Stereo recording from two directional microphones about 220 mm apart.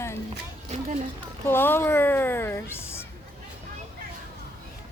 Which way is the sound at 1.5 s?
10° left (ahead or behind).